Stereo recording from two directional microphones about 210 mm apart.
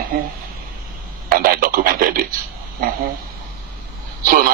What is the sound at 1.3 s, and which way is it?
Speech, 45° right (ahead or behind).